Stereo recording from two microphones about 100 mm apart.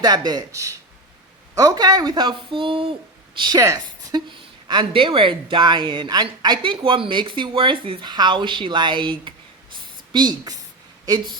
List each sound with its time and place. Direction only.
0.0 s speech: 40° right (ahead or behind)
2.6 s a sound: 60° right (ahead or behind)
3.3 s speech: 50° right (ahead or behind)